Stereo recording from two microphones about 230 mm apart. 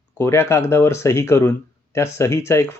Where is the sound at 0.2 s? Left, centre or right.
Centre.